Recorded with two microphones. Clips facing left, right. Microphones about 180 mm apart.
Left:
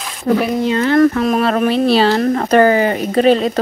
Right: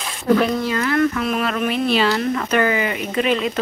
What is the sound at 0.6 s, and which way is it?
Speech, 25° left (ahead or behind).